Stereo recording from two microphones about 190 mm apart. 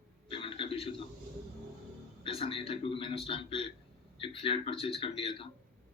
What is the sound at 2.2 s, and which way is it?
Speech, 30° left (ahead or behind).